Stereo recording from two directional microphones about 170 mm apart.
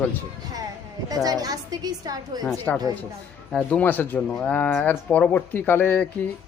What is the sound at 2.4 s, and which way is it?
Speech, 10° left (ahead or behind).